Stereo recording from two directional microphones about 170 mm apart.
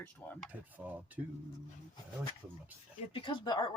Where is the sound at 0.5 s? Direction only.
10° right (ahead or behind).